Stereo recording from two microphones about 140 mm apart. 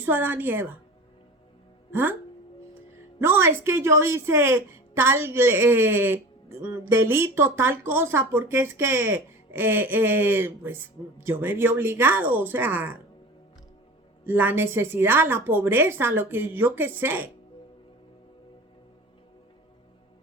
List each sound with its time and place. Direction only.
0.0 s speech: 15° right (ahead or behind)
1.9 s speech: 15° right (ahead or behind)
3.2 s speech: 15° right (ahead or behind)
14.3 s speech: 15° right (ahead or behind)